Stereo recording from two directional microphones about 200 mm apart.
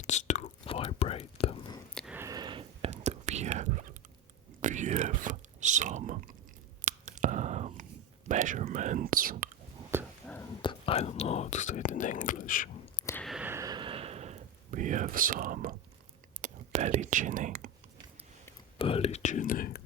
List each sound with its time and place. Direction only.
0.0 s whispering: 35° left (ahead or behind)
2.1 s whispering: 15° right (ahead or behind); by 3.8 s 35° right (ahead or behind)
4.6 s chewing: 40° right (ahead or behind)
6.8 s whispering: 40° right (ahead or behind)
8.3 s speech: 40° right (ahead or behind)
9.9 s a sound: 10° right (ahead or behind)
10.6 s whispering: 25° left (ahead or behind); by 12.7 s 45° left (ahead or behind)
13.2 s a sound: 5° right (ahead or behind); by 15.7 s 40° right (ahead or behind)
16.4 s whispering: 35° right (ahead or behind)
18.8 s whispering: 30° left (ahead or behind); by 19.8 s 45° left (ahead or behind)